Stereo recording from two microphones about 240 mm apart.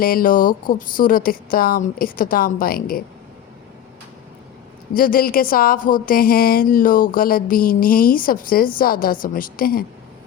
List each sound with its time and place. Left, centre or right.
0.0 s speech: left
4.9 s speech: left